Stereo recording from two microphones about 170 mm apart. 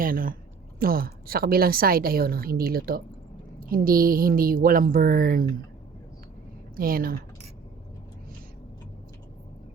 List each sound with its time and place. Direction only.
0.0 s a woman's voice: 55° right (ahead or behind)
6.7 s a woman's voice: 60° right (ahead or behind)